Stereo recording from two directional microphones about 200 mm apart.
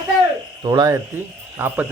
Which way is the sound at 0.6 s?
15° right (ahead or behind).